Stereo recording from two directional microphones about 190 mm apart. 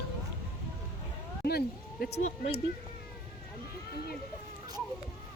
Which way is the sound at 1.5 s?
55° left (ahead or behind).